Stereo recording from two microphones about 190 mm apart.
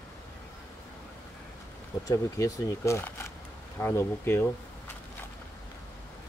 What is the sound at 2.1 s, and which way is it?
Speech, 20° left (ahead or behind).